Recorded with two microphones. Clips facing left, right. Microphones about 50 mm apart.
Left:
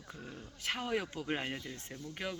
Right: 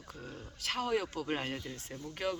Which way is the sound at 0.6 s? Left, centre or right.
Centre.